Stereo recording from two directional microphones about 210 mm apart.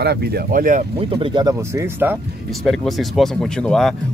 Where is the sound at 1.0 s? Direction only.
25° right (ahead or behind).